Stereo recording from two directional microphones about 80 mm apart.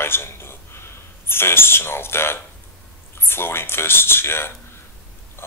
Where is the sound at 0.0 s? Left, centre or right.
Left.